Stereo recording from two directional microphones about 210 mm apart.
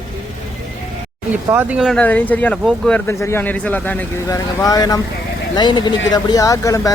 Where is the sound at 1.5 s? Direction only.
5° right (ahead or behind); by 6.9 s 15° left (ahead or behind).